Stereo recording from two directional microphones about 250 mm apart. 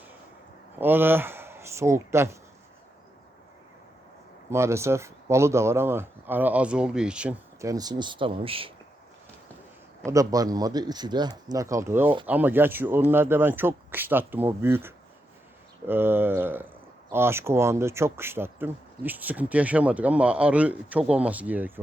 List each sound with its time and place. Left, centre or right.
0.8 s speech: centre
4.5 s speech: centre
10.1 s speech: centre